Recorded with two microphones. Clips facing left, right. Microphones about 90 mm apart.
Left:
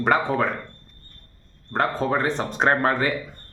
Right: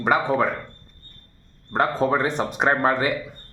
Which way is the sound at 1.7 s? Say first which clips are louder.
Right 2 dB; 15° right (ahead or behind).